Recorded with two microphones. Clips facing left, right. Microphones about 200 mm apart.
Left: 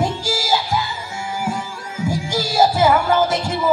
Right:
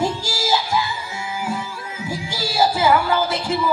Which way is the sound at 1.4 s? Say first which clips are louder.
Left 1 dB; 45° left (ahead or behind).